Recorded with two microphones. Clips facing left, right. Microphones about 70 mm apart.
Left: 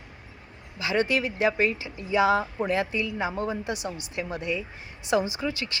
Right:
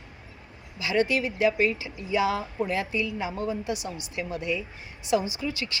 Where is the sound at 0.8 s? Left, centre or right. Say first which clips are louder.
Even; left.